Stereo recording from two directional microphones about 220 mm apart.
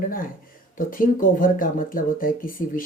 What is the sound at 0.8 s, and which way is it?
Speech, 40° left (ahead or behind).